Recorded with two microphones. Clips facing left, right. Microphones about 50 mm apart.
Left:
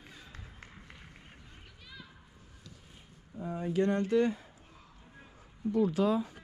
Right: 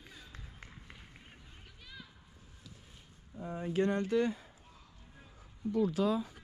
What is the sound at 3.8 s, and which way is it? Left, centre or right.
Speech, left.